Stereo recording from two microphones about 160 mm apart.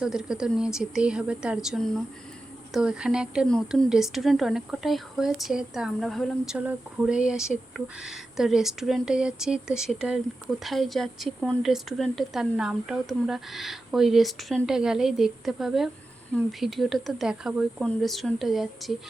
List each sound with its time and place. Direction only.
0.0 s a woman's voice: 5° right (ahead or behind)